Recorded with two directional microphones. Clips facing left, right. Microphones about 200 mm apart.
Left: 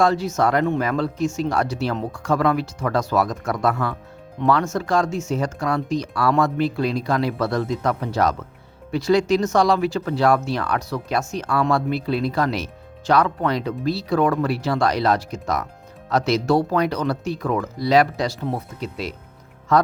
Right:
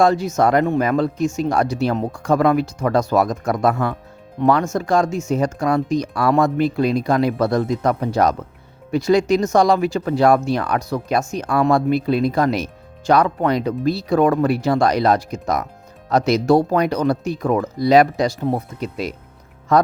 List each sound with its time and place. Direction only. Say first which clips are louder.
0.0 s speech: right 3 dB; 15° right (ahead or behind)
19.7 s speech: right 3 dB; 15° right (ahead or behind)